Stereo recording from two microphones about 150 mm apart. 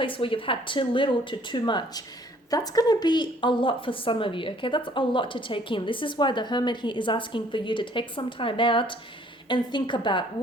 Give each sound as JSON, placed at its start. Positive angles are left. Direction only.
{"t": 0.0, "sound": "a woman's voice", "side_deg": 35}